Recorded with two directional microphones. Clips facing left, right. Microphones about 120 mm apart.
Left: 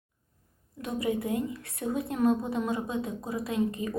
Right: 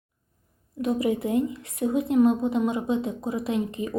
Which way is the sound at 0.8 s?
25° right (ahead or behind).